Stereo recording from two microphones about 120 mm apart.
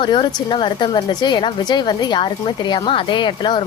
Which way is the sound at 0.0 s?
40° left (ahead or behind).